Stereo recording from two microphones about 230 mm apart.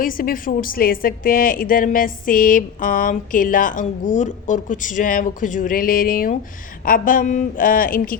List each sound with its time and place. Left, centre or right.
0.0 s a woman's voice: left